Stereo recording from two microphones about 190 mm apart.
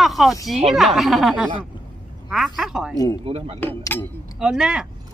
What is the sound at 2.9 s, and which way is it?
Speech, 20° left (ahead or behind).